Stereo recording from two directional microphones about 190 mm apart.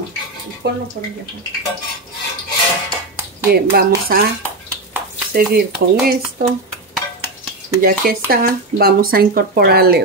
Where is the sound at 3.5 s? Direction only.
55° right (ahead or behind).